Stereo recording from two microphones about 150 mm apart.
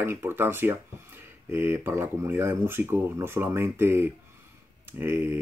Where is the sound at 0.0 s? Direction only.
15° right (ahead or behind).